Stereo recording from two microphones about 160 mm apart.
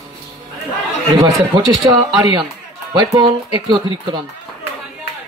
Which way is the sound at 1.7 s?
20° right (ahead or behind).